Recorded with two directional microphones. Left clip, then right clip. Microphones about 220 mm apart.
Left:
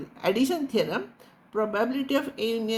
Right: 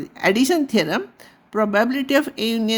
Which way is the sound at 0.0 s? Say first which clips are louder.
Right 7 dB; 50° right (ahead or behind).